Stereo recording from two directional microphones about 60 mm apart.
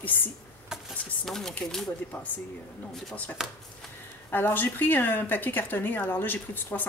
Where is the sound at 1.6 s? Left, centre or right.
Centre.